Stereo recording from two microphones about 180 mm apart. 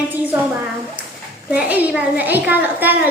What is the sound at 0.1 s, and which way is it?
A woman's voice, 10° right (ahead or behind).